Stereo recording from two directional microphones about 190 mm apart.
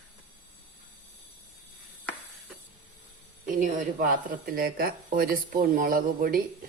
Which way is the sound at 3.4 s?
45° right (ahead or behind).